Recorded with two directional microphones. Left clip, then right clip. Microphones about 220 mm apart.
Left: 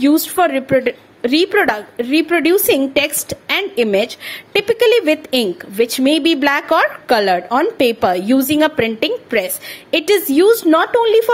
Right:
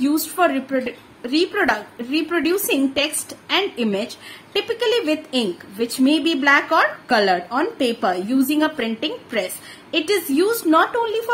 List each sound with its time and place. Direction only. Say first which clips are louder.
0.0 s a woman's voice: left 5 dB; 35° left (ahead or behind)